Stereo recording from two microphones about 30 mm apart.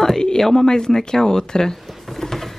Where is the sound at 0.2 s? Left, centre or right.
Left.